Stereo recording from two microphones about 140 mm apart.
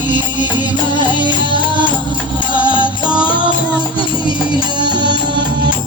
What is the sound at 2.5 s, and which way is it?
Music, 35° left (ahead or behind).